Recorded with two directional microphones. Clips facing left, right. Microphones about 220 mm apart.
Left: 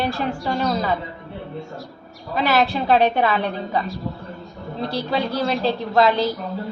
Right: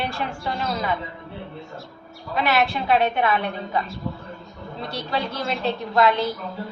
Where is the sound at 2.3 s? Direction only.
35° left (ahead or behind).